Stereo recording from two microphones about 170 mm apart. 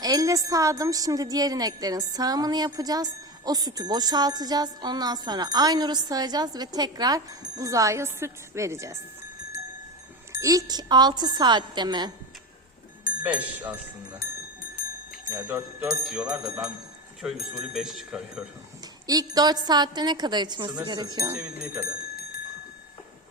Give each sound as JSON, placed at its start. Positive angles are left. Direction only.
{"t": 0.0, "sound": "a woman's voice", "side_deg": -20}
{"t": 10.4, "sound": "a woman's voice", "side_deg": -20}
{"t": 13.2, "sound": "speech", "side_deg": -10}
{"t": 15.3, "sound": "speech", "side_deg": -15}
{"t": 19.0, "sound": "a woman's voice", "side_deg": -20}
{"t": 21.3, "sound": "speech", "side_deg": -5}